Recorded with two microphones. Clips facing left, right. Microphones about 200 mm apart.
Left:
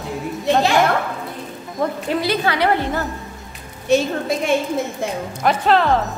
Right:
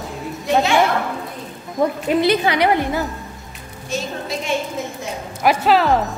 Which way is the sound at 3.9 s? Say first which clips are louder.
Left 9 dB; 65° left (ahead or behind).